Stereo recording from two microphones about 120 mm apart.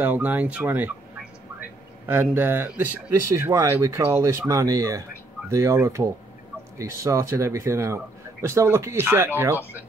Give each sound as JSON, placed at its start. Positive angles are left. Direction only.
{"t": 0.0, "sound": "speech", "side_deg": -15}